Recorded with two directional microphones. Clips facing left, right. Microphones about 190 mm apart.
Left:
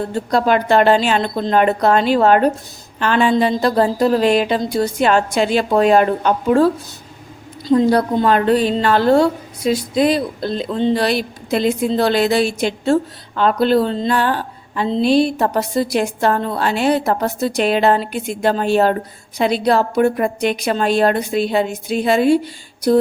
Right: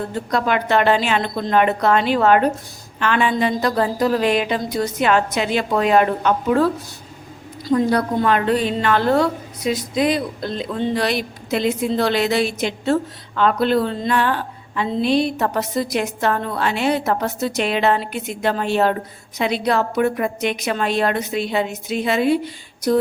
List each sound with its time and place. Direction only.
0.1 s a woman's voice: 30° left (ahead or behind)
7.7 s a woman's voice: 30° left (ahead or behind)